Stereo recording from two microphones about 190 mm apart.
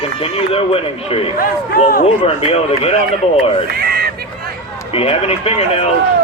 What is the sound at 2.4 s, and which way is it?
Speech, 30° left (ahead or behind).